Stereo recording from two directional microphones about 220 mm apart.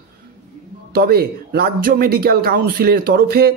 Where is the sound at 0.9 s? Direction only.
45° right (ahead or behind).